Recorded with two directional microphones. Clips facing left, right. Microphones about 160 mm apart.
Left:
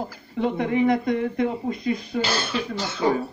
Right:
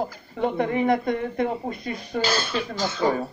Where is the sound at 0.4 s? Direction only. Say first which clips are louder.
Left 1 dB; 45° right (ahead or behind).